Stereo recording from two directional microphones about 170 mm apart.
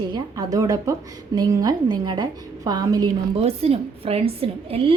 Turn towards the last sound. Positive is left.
turn(degrees=-35)  # may be behind; listen again after turning